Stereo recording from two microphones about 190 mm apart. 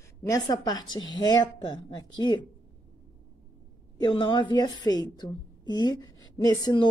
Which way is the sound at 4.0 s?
25° left (ahead or behind).